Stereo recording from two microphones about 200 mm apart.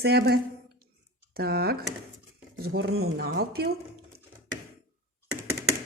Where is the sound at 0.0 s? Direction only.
55° right (ahead or behind).